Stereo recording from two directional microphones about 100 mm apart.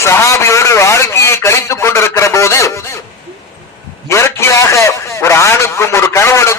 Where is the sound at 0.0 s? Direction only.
30° left (ahead or behind).